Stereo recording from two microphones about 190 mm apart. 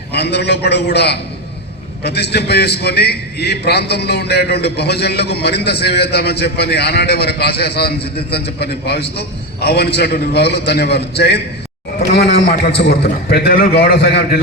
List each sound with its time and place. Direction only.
0.1 s a man's voice: 60° left (ahead or behind)